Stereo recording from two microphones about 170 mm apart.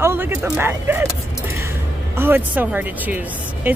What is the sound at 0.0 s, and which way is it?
Speech, 15° right (ahead or behind).